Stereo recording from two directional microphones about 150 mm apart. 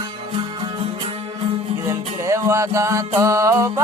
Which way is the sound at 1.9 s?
20° right (ahead or behind).